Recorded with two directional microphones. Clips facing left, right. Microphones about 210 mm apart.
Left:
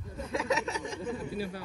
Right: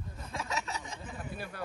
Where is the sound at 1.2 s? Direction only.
55° right (ahead or behind).